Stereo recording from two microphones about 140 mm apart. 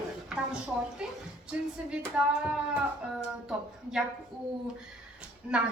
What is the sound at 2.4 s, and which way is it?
A woman's voice, 5° right (ahead or behind).